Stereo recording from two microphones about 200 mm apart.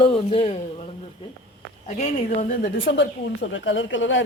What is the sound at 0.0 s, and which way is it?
Speech, 30° left (ahead or behind).